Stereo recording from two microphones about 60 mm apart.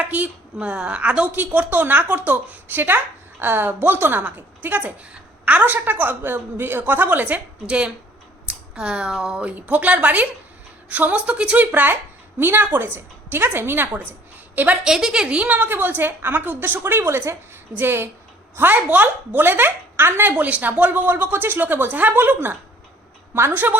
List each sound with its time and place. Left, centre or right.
0.0 s a woman's voice: right
9.5 s a woman's voice: right
11.6 s a woman's voice: right
14.8 s a woman's voice: centre; by 20.3 s right
20.3 s a woman's voice: right
23.3 s a woman's voice: right